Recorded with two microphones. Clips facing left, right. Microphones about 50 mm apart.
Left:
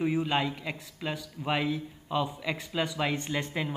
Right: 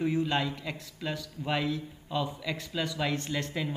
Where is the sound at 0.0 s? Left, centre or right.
Centre.